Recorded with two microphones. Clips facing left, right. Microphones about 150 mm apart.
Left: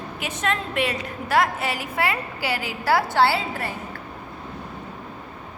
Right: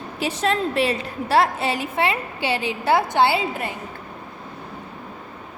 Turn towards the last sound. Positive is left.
turn(degrees=-20)  # may be behind; listen again after turning